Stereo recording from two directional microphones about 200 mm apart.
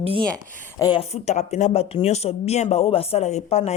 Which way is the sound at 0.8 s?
25° left (ahead or behind).